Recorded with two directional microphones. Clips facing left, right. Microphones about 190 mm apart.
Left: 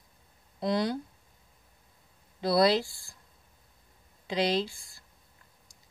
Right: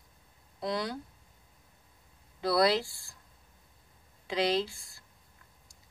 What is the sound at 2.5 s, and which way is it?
Speech, 25° left (ahead or behind).